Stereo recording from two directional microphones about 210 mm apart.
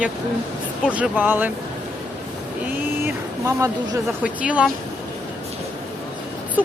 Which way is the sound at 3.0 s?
15° right (ahead or behind).